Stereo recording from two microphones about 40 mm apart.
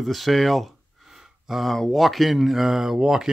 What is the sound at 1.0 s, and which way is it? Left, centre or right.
Gasp, centre.